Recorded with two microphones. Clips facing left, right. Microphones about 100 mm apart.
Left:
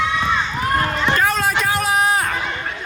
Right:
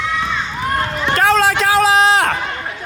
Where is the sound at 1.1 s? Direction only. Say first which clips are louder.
Right 8 dB; 85° right.